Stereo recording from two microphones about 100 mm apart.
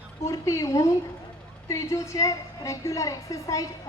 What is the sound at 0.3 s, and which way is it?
A woman's voice, 35° left (ahead or behind).